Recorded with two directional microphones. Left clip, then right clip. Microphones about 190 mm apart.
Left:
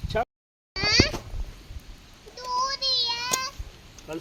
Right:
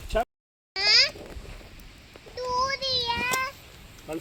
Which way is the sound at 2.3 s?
35° right (ahead or behind).